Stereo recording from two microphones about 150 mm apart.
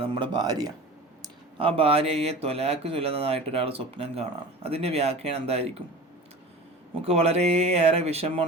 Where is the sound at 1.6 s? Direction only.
40° right (ahead or behind).